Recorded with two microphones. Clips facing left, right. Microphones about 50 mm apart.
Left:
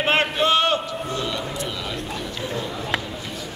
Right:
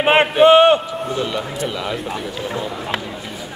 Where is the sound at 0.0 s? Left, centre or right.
Right.